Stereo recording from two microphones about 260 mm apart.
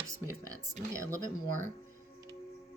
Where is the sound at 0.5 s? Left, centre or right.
Centre.